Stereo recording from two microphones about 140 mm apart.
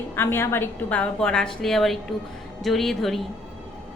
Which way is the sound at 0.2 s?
15° left (ahead or behind).